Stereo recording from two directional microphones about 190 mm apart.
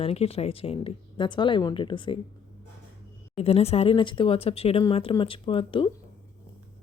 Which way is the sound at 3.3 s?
30° left (ahead or behind).